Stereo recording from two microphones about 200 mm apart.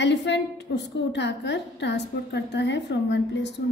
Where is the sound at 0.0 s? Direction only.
60° left (ahead or behind).